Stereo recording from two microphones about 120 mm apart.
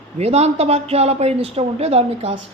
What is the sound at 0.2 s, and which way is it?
A woman's voice, 65° right (ahead or behind).